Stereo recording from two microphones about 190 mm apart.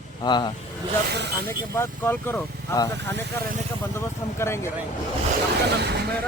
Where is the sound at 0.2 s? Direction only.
25° left (ahead or behind).